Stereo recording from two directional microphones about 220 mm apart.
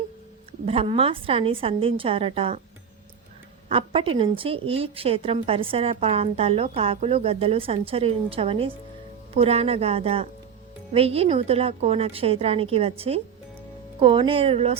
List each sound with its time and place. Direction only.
0.6 s a woman's voice: 25° right (ahead or behind)
3.7 s a woman's voice: 25° right (ahead or behind)